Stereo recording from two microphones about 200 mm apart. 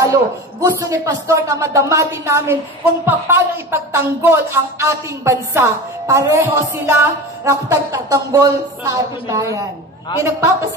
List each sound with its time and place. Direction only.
0.0 s speech: 15° right (ahead or behind)